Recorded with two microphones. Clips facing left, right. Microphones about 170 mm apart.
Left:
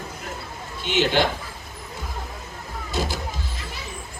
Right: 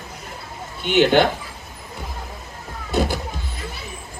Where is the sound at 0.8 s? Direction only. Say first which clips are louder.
Right 6 dB; 55° right (ahead or behind).